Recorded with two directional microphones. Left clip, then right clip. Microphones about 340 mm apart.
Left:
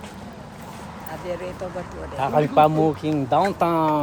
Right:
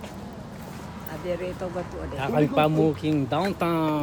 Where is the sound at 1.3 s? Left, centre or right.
Centre.